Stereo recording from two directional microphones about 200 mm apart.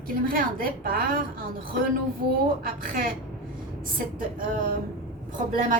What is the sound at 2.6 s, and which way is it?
Speech, 45° right (ahead or behind).